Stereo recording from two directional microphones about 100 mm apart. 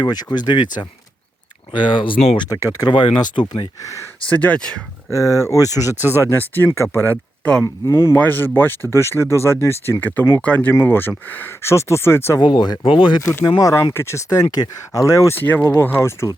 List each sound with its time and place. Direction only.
0.0 s speech: 45° left (ahead or behind)
2.5 s speech: 35° left (ahead or behind)
2.9 s speech: 55° left (ahead or behind)
4.3 s speech: 15° left (ahead or behind)
5.1 s speech: 35° left (ahead or behind)
6.1 s speech: 25° left (ahead or behind)
7.6 s speech: 30° left (ahead or behind)
12.4 s speech: 45° left (ahead or behind)
12.8 s speech: 60° left (ahead or behind)
13.6 s speech: 35° left (ahead or behind)
15.4 s speech: 20° left (ahead or behind)